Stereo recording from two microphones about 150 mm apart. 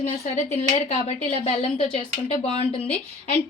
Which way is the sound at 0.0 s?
50° left (ahead or behind).